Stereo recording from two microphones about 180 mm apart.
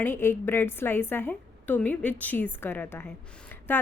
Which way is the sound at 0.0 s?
10° left (ahead or behind).